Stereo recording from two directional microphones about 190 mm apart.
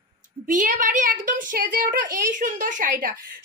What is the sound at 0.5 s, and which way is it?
A woman's voice, 45° right (ahead or behind).